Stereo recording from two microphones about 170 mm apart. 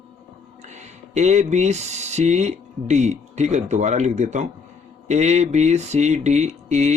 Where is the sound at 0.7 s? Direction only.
40° right (ahead or behind).